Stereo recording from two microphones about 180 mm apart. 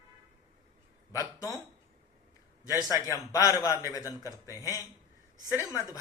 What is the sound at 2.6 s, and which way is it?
A man's voice, 20° left (ahead or behind).